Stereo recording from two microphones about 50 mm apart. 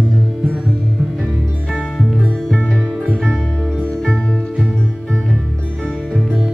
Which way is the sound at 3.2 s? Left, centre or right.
Centre.